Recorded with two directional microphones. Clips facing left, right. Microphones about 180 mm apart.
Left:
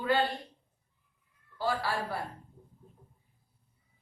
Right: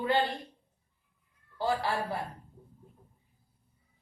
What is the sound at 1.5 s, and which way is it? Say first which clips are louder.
Speech: right 2 dB; 20° right (ahead or behind).